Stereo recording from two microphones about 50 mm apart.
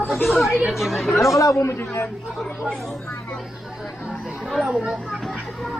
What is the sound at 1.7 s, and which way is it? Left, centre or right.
Speech, left.